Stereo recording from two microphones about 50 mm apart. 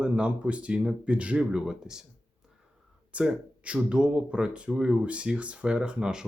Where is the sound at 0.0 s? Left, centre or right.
Right.